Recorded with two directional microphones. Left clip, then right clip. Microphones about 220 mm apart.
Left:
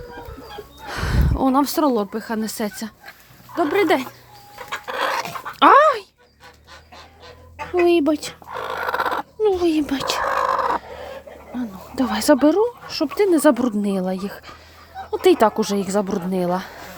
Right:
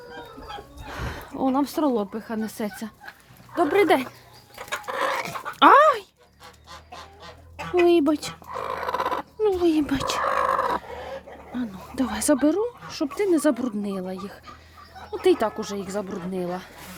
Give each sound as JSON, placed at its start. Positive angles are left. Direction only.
{"t": 0.9, "sound": "speech", "side_deg": 15}
{"t": 3.5, "sound": "speech", "side_deg": 0}
{"t": 4.9, "sound": "dog", "side_deg": -5}
{"t": 7.9, "sound": "a sound", "side_deg": 0}
{"t": 11.5, "sound": "a woman's voice", "side_deg": 0}